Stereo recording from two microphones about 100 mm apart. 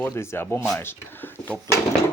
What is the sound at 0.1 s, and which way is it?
Speech, 25° left (ahead or behind).